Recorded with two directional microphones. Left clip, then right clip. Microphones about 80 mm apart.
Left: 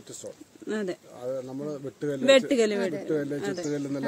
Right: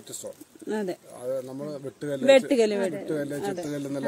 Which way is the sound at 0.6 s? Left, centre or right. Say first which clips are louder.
Right 1 dB; right.